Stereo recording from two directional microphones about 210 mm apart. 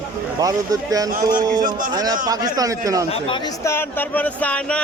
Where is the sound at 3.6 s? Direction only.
10° left (ahead or behind).